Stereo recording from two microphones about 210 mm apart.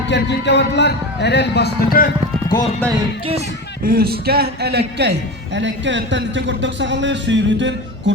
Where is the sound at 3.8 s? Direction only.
45° right (ahead or behind).